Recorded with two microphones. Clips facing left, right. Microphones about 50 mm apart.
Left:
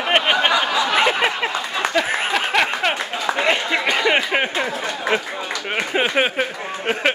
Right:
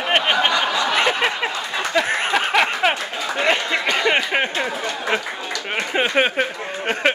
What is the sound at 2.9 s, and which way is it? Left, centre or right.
Clapping, centre.